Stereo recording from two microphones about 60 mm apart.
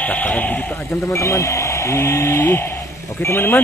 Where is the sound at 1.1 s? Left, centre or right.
Left.